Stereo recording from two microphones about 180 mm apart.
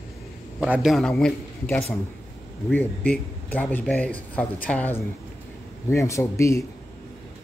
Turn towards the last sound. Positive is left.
turn(degrees=15)  # may be behind; listen again after turning